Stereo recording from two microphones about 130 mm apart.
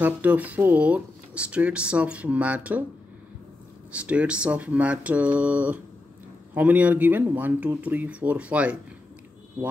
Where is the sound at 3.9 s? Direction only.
10° right (ahead or behind).